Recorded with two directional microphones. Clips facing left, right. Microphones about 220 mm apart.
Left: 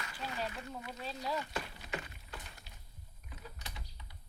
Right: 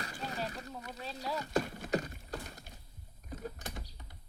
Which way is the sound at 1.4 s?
45° right (ahead or behind).